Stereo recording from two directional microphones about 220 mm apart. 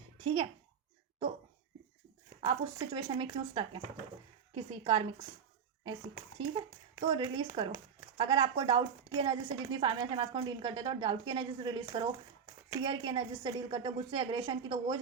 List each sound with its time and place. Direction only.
2.4 s speech: 20° right (ahead or behind)
6.4 s speech: 20° right (ahead or behind)